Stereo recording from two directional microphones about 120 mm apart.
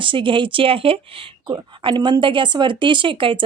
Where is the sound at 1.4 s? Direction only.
40° right (ahead or behind).